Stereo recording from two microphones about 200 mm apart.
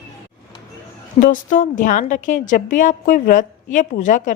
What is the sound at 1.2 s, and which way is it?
A woman's voice, 40° left (ahead or behind).